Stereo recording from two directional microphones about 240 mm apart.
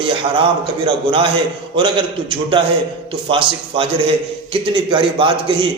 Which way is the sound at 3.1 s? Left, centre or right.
Right.